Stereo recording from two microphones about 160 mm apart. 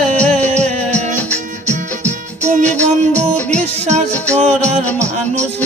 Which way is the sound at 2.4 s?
50° right (ahead or behind).